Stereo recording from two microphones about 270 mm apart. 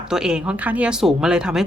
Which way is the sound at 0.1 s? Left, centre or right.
Centre.